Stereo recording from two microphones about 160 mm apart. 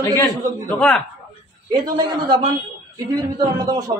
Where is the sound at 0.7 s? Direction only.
10° left (ahead or behind).